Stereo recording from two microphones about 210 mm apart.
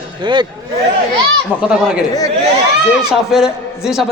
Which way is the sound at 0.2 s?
20° right (ahead or behind).